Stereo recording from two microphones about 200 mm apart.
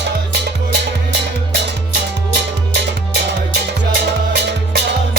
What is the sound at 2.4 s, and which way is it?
Music, 55° right (ahead or behind).